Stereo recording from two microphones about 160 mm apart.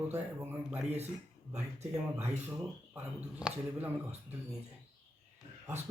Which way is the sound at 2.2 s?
10° right (ahead or behind).